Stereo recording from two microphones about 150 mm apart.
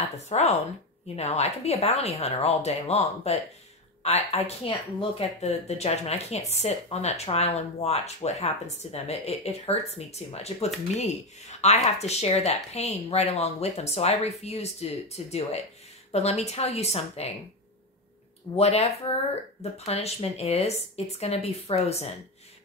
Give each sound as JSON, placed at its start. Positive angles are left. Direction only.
{"t": 0.3, "sound": "speech", "side_deg": 45}
{"t": 18.6, "sound": "speech", "side_deg": 45}